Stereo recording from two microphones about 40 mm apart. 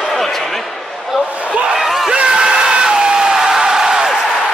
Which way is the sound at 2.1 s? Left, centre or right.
Right.